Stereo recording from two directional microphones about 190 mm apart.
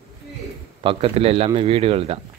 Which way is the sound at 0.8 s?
30° right (ahead or behind).